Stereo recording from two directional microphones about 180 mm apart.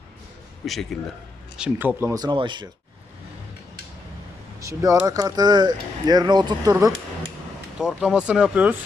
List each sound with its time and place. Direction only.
0.6 s a man's voice: centre (ahead or behind); by 2.6 s 25° right (ahead or behind)
4.6 s speech: 20° right (ahead or behind)
7.8 s speech: 5° right (ahead or behind)